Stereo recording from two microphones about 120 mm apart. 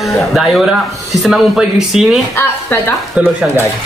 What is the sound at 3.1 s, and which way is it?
Speech, 10° right (ahead or behind).